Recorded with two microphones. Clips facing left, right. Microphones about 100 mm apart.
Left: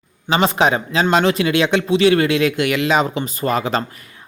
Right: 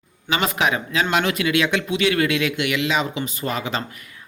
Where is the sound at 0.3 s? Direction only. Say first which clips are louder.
Left 5 dB; 30° left (ahead or behind).